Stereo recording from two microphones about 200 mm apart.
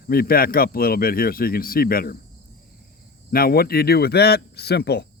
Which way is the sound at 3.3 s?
50° left (ahead or behind).